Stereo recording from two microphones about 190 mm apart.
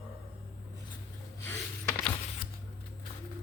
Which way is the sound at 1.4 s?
10° left (ahead or behind).